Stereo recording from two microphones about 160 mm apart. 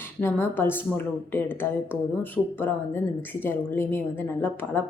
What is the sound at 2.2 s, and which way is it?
A woman's voice, 10° left (ahead or behind).